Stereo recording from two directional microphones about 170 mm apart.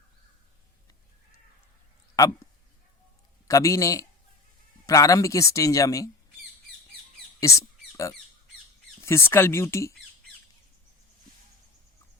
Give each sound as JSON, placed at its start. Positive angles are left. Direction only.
{"t": 3.4, "sound": "a man's voice", "side_deg": 20}
{"t": 7.3, "sound": "mouse", "side_deg": 20}
{"t": 9.0, "sound": "speech", "side_deg": 15}